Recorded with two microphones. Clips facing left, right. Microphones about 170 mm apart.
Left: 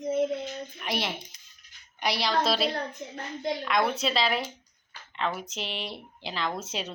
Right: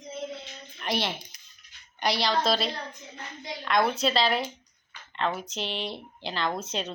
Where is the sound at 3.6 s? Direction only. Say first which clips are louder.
Right 4 dB; 5° left (ahead or behind).